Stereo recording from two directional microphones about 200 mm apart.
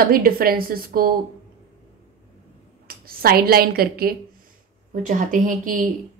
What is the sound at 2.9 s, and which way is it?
A woman's voice, 50° right (ahead or behind).